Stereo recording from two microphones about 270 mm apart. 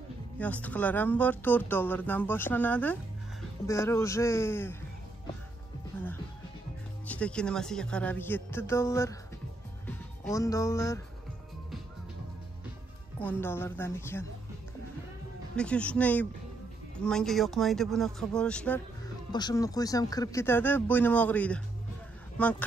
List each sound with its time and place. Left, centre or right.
0.4 s speech: centre
7.1 s speech: centre
13.2 s speech: centre
15.5 s speech: centre